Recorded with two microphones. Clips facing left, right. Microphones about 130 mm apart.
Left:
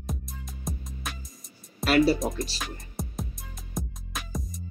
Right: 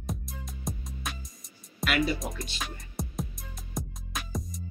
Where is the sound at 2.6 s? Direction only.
Centre (ahead or behind).